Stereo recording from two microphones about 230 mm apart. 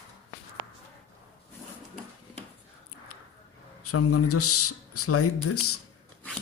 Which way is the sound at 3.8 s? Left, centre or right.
Left.